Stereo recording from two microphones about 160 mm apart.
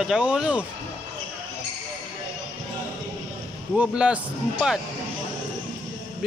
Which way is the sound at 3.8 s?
5° right (ahead or behind).